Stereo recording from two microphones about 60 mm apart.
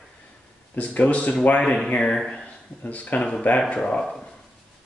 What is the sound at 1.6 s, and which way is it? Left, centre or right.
Speech, centre.